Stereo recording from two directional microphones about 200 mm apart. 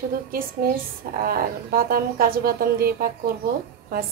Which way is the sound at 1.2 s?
50° right (ahead or behind).